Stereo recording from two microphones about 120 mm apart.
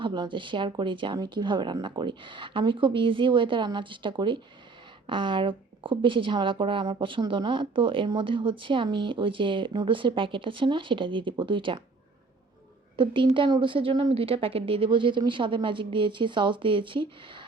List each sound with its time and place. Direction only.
0.0 s a woman's voice: 40° right (ahead or behind)
13.3 s a woman's voice: 45° right (ahead or behind)